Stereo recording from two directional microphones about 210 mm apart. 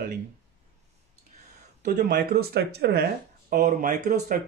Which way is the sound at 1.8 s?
45° right (ahead or behind).